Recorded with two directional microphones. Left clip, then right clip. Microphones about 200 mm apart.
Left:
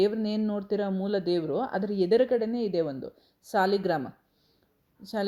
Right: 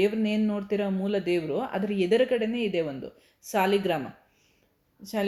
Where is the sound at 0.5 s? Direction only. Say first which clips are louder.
Right 1 dB; 10° left (ahead or behind).